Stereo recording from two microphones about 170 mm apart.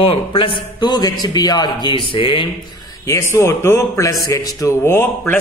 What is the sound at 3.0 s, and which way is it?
Speech, 15° left (ahead or behind).